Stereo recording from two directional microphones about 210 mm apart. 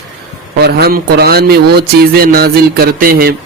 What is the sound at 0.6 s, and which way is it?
Speech, 45° right (ahead or behind).